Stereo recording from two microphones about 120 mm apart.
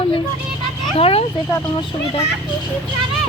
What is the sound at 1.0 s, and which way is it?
Speech, 55° left (ahead or behind).